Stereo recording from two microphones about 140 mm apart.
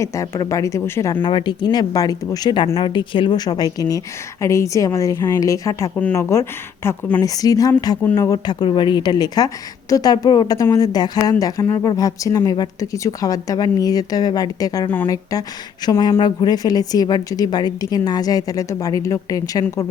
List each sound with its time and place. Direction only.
0.0 s a woman's voice: 20° left (ahead or behind)
1.1 s a woman's voice: 35° left (ahead or behind)